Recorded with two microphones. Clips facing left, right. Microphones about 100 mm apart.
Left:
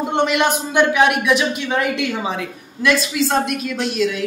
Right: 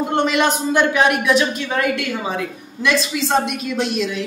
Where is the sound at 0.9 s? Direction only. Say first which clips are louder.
Even; 10° left (ahead or behind).